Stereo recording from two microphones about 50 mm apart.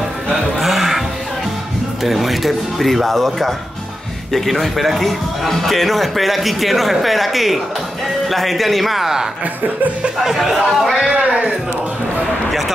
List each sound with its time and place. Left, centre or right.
0.3 s music: centre
2.0 s a man's voice: centre
11.1 s speech: centre